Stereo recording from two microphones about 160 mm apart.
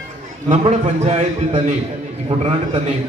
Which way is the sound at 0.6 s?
45° right (ahead or behind).